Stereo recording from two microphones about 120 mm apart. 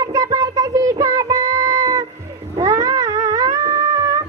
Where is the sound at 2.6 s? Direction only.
25° right (ahead or behind).